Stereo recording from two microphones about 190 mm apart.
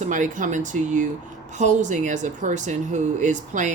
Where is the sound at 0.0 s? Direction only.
40° right (ahead or behind).